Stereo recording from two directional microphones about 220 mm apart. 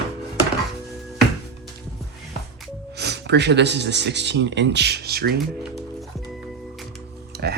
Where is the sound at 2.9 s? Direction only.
50° right (ahead or behind).